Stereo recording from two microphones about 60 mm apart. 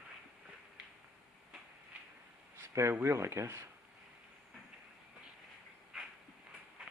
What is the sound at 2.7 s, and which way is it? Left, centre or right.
Speech, right.